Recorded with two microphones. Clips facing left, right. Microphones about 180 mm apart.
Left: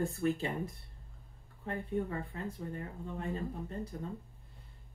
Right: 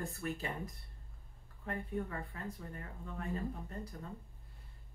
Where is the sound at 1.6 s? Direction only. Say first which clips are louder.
Left 4 dB; 30° left (ahead or behind).